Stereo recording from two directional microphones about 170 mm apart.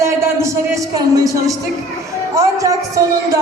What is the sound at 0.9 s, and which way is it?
Speech, 20° right (ahead or behind).